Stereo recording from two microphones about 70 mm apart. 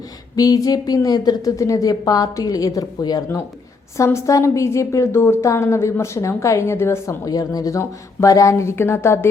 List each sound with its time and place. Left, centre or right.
0.3 s a woman's voice: left
1.5 s a woman's voice: left
3.0 s speech: left
3.9 s a woman's voice: left
7.3 s a woman's voice: left
7.8 s a woman's voice: left